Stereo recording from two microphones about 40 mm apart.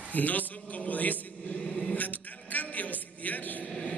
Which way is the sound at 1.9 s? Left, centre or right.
Left.